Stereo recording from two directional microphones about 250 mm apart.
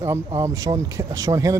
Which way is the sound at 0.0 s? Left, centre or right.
Centre.